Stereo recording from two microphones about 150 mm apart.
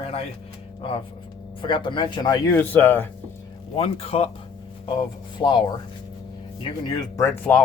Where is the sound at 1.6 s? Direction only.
30° left (ahead or behind).